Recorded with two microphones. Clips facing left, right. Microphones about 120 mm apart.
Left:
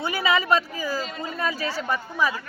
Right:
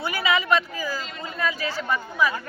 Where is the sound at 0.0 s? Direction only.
30° left (ahead or behind).